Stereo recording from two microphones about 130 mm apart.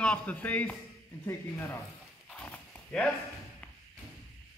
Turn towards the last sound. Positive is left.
turn(degrees=10)  # may be behind; listen again after turning